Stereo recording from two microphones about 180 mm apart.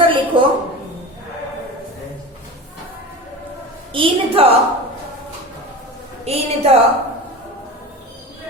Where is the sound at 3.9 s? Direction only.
30° right (ahead or behind).